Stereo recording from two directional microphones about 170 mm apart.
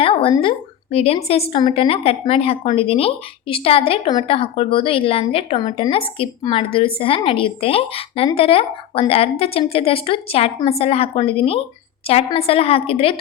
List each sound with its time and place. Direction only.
0.0 s a woman's voice: 30° left (ahead or behind)